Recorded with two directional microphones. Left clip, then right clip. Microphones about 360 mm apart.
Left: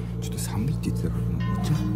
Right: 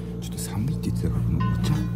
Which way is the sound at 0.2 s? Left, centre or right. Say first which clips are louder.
Left 4 dB; centre.